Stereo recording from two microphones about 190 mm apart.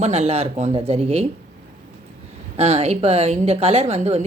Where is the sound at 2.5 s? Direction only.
35° right (ahead or behind).